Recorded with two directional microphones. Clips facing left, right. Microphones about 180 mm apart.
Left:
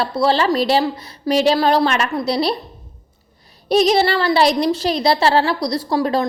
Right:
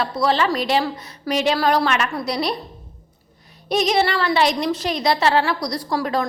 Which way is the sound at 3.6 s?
35° left (ahead or behind).